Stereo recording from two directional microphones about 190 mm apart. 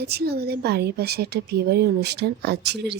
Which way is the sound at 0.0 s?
60° right (ahead or behind).